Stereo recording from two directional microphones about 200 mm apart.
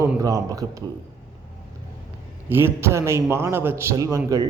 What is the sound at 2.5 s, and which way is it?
Speech, 10° right (ahead or behind).